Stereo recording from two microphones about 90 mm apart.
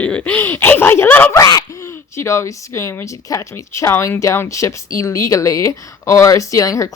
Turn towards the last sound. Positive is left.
turn(degrees=35)  # may be behind; listen again after turning